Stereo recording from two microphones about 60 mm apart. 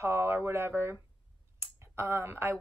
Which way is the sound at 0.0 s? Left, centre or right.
Right.